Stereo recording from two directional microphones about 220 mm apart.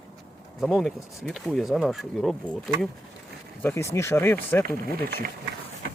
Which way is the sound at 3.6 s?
10° left (ahead or behind).